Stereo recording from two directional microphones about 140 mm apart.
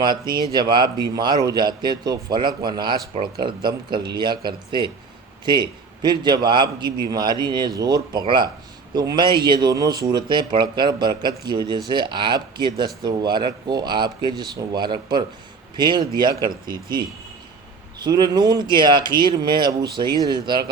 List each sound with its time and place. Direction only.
0.0 s a man's voice: 30° right (ahead or behind)